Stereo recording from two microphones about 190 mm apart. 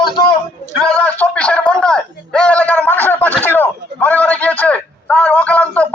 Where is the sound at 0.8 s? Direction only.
5° left (ahead or behind).